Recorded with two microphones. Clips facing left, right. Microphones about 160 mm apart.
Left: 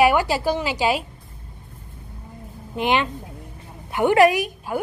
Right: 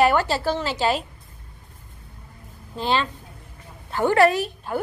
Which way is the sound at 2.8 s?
15° left (ahead or behind).